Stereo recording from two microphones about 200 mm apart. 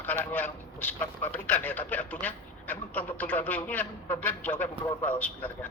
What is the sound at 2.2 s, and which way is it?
A man's voice, 10° left (ahead or behind).